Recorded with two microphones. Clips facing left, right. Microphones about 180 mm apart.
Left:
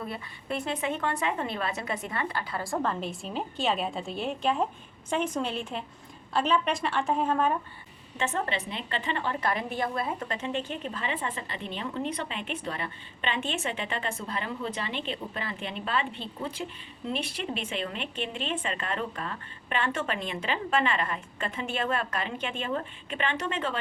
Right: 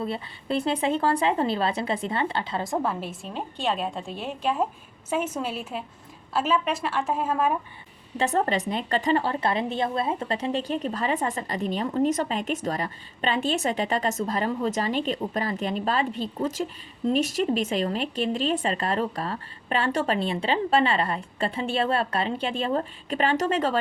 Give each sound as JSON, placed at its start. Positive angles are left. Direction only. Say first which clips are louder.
{"t": 0.0, "sound": "speech", "louder": "right 6 dB", "side_deg": -30}
{"t": 2.8, "sound": "a woman's voice", "louder": "right 2 dB", "side_deg": -5}
{"t": 8.2, "sound": "a woman's voice", "louder": "right 6 dB", "side_deg": -40}